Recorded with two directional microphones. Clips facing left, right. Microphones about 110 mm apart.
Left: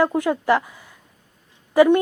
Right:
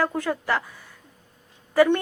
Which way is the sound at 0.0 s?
20° left (ahead or behind).